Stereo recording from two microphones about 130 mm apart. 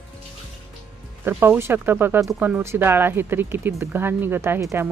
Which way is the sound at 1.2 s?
15° right (ahead or behind).